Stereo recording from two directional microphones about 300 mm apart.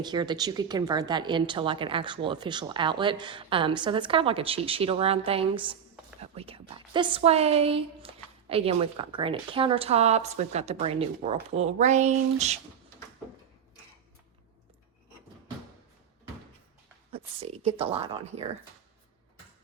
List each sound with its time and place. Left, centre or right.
0.0 s speech: centre
17.1 s speech: centre